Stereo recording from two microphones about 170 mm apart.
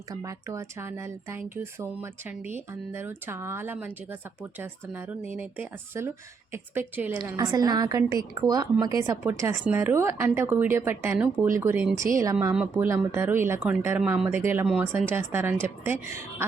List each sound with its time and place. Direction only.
0.1 s a woman's voice: 20° right (ahead or behind)